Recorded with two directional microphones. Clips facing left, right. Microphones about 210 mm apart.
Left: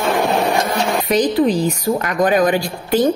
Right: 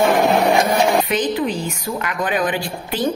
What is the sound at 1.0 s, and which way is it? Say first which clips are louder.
A woman's voice: left 5 dB; 40° left (ahead or behind).